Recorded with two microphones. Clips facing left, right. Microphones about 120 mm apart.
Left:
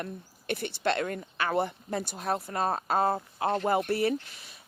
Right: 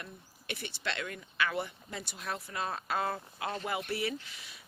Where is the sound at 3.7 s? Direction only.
45° left (ahead or behind).